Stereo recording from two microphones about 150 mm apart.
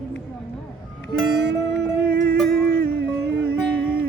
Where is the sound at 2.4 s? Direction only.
90° right.